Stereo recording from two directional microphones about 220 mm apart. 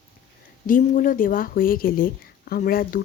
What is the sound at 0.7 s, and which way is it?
Speech, 35° left (ahead or behind).